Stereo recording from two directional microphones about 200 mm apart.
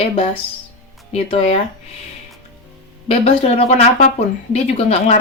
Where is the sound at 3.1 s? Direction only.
30° left (ahead or behind).